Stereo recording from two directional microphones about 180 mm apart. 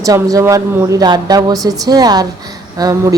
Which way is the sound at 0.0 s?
20° right (ahead or behind).